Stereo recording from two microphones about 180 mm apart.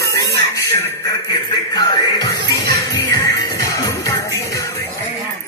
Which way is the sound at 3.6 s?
15° left (ahead or behind).